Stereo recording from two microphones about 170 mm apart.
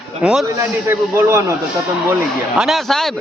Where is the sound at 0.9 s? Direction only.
15° right (ahead or behind).